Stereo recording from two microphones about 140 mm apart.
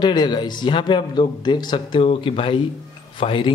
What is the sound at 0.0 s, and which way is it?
Speech, 30° left (ahead or behind).